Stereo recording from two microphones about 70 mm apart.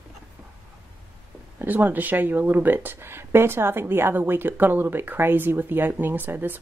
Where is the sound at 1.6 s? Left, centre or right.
Right.